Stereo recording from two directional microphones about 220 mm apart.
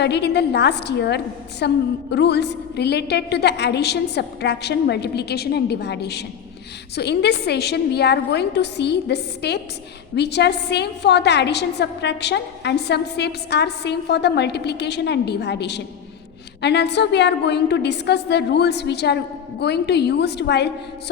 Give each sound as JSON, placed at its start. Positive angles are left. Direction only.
{"t": 0.0, "sound": "a woman's voice", "side_deg": 50}